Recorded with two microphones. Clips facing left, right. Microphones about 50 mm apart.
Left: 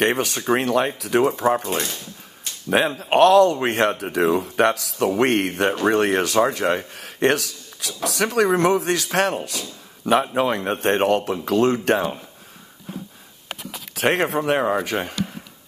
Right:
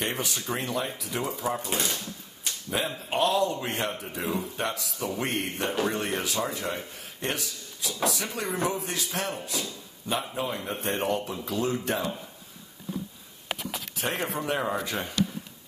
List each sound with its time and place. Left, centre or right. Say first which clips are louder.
0.0 s speech: left 10 dB; left
2.8 s speech: left 11 dB; left
13.5 s a sound: right 1 dB; centre
13.9 s speech: left 12 dB; left
14.2 s speech: left 9 dB; left